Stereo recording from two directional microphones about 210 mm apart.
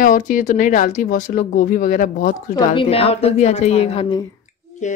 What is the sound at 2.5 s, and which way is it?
A woman's voice, 25° left (ahead or behind).